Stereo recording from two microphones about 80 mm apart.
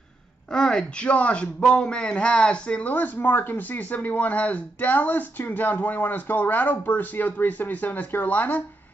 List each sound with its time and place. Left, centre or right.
0.5 s a man's voice: centre